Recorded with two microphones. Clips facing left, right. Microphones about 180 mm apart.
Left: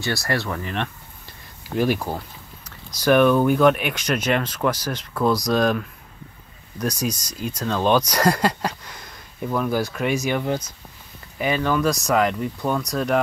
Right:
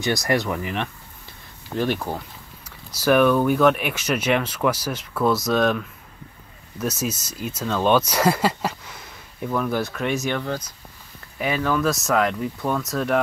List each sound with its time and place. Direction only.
0.0 s speech: 20° right (ahead or behind)
1.8 s speech: 5° left (ahead or behind)